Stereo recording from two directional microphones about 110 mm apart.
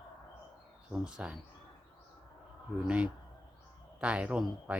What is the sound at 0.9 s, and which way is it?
Speech, 5° right (ahead or behind).